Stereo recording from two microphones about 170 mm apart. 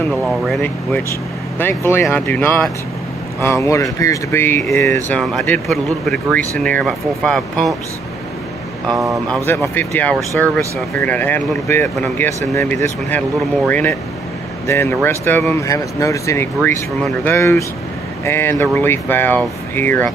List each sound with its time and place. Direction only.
0.1 s speech: centre (ahead or behind)
1.6 s speech: 15° left (ahead or behind)
5.1 s speech: centre (ahead or behind)
8.8 s speech: 20° right (ahead or behind)
9.3 s speech: 10° left (ahead or behind)